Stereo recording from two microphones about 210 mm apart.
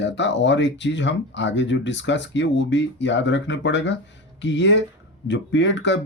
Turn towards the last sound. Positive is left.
turn(degrees=60)  # may be behind; listen again after turning